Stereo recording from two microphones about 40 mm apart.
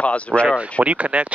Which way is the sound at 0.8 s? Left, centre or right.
Right.